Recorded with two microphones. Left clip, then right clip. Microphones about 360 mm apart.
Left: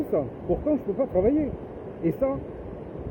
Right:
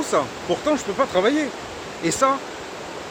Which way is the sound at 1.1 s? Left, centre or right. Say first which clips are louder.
Right 2 dB; right.